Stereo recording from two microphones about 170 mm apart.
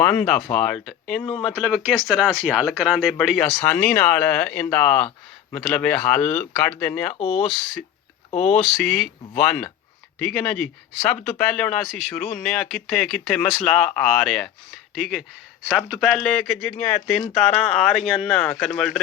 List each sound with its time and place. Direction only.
0.0 s speech: 5° left (ahead or behind)
7.2 s speech: 35° left (ahead or behind)
8.8 s speech: 5° left (ahead or behind)